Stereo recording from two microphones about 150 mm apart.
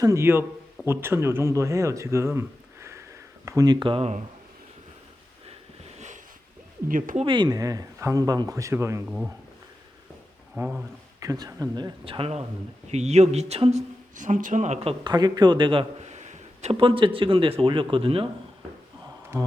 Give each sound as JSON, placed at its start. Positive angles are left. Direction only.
{"t": 0.0, "sound": "a man's voice", "side_deg": -20}
{"t": 6.8, "sound": "speech", "side_deg": -65}
{"t": 7.2, "sound": "speech", "side_deg": -30}
{"t": 9.0, "sound": "speech", "side_deg": -5}
{"t": 10.6, "sound": "speech", "side_deg": -20}
{"t": 15.0, "sound": "a man's voice", "side_deg": -30}